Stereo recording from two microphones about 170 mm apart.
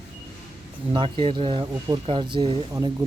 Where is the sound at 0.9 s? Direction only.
30° right (ahead or behind).